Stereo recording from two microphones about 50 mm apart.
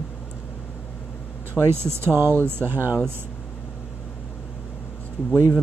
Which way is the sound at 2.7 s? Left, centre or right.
Right.